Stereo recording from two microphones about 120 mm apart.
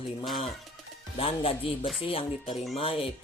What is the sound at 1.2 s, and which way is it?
Speech, 50° left (ahead or behind).